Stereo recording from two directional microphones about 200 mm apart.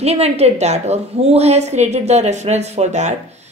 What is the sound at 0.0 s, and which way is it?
A woman's voice, 30° right (ahead or behind).